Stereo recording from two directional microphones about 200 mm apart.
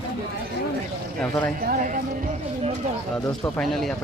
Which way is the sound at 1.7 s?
45° right (ahead or behind).